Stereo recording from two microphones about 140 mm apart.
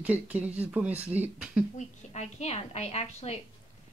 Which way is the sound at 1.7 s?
55° left (ahead or behind).